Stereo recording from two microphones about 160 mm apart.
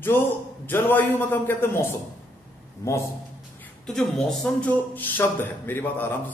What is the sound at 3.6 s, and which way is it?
Speech, 5° left (ahead or behind).